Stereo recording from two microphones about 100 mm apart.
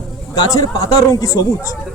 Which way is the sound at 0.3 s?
40° left (ahead or behind).